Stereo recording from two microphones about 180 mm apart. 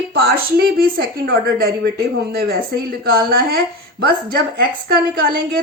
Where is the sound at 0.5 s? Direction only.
55° right (ahead or behind).